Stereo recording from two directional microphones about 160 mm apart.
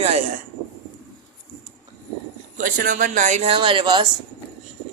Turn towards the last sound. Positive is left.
turn(degrees=-30)  # may be behind; listen again after turning